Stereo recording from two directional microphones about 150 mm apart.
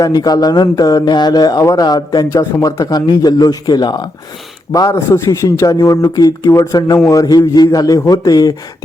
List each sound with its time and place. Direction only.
0.0 s speech: 25° left (ahead or behind)